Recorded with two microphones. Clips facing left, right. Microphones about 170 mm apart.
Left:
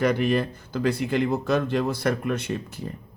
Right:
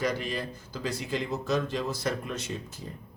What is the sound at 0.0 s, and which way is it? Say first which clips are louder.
Speech: left 8 dB; 60° left (ahead or behind).